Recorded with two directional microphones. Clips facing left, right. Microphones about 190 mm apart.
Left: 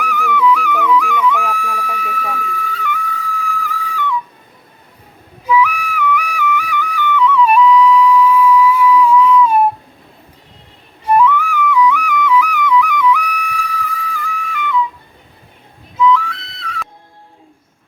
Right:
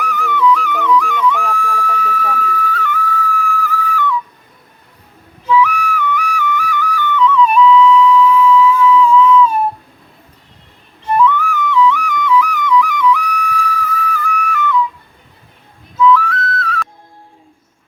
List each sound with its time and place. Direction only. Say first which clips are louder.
0.0 s music: even; 10° left (ahead or behind)
5.5 s flute: right 1 dB; 10° left (ahead or behind)
11.0 s flute: left 1 dB; 10° left (ahead or behind)
16.0 s whistle: right 2 dB; 20° left (ahead or behind)